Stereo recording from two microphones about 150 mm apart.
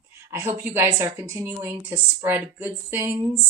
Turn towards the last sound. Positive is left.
turn(degrees=-15)  # may be behind; listen again after turning